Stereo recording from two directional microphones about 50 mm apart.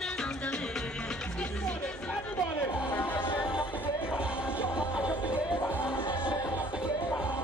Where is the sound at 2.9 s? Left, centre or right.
Left.